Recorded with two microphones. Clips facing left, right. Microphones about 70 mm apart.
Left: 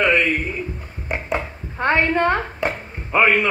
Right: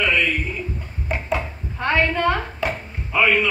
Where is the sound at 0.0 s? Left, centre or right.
Left.